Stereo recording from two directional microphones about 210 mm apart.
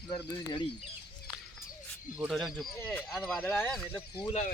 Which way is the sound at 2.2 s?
Centre (ahead or behind).